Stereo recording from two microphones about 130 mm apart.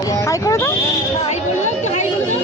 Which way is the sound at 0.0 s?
25° left (ahead or behind).